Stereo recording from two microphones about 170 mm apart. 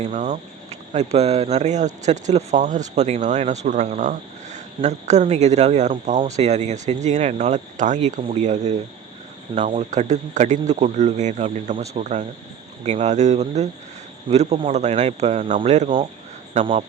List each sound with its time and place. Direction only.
0.0 s speech: 45° right (ahead or behind)